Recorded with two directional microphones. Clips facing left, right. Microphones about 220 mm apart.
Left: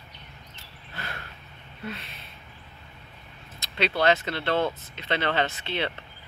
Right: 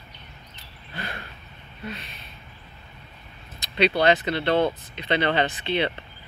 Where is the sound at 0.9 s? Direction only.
15° right (ahead or behind).